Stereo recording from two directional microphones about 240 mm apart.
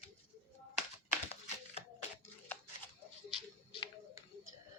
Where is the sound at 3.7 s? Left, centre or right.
Left.